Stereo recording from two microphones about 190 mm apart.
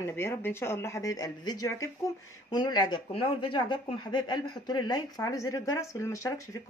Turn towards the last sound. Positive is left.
turn(degrees=15)  # may be behind; listen again after turning